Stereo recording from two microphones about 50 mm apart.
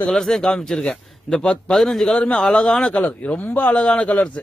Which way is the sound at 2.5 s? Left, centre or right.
Centre.